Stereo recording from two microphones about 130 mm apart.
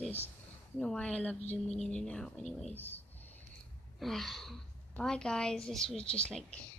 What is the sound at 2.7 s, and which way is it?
Speech, 15° left (ahead or behind).